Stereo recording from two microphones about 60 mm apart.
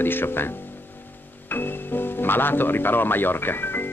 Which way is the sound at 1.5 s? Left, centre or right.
Left.